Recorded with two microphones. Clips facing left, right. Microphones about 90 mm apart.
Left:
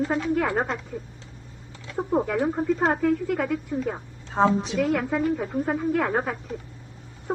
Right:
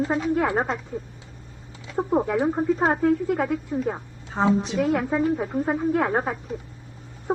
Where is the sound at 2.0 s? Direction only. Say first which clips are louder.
Right 2 dB; 20° right (ahead or behind).